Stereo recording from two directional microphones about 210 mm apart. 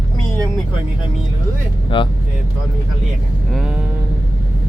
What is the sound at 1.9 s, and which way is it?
Speech, 25° left (ahead or behind).